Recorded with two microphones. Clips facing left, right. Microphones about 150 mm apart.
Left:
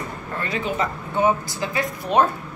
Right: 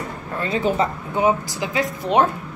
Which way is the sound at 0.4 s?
25° right (ahead or behind).